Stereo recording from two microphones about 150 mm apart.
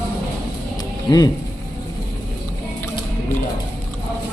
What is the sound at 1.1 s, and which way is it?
Speech, 25° left (ahead or behind).